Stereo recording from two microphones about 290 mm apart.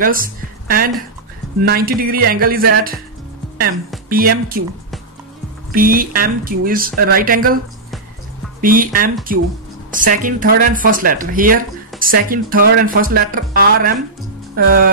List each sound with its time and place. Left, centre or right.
0.0 s a woman's voice: right
4.1 s speech: right
5.7 s speech: right
8.5 s speech: right